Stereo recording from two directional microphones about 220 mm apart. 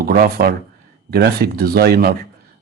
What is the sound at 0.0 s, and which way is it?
Speech, 45° right (ahead or behind).